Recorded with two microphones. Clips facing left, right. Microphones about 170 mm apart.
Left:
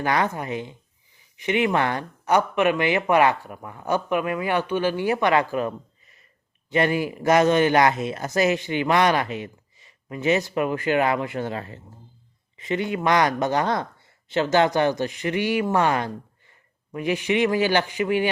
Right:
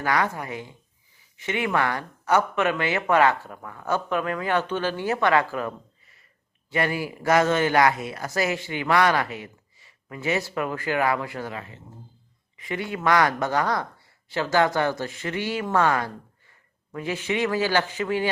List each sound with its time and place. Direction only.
0.0 s a man's voice: 20° left (ahead or behind)
12.5 s a man's voice: 25° left (ahead or behind)